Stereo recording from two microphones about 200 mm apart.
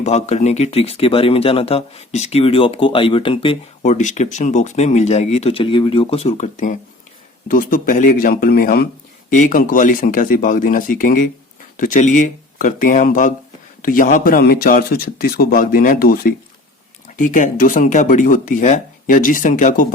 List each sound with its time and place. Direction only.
0.0 s speech: 35° left (ahead or behind)